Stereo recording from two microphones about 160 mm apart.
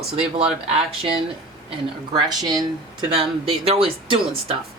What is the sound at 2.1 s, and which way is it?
Speech, 25° right (ahead or behind).